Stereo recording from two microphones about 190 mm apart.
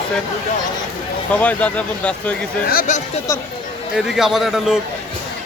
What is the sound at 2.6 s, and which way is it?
Speech, 50° left (ahead or behind).